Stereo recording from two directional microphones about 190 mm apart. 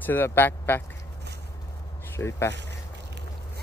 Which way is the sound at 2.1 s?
15° left (ahead or behind).